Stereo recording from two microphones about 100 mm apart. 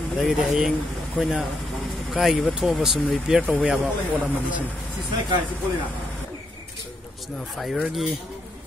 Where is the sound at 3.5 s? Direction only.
10° right (ahead or behind).